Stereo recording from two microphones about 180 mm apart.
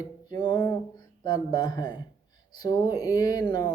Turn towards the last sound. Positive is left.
turn(degrees=25)  # may be behind; listen again after turning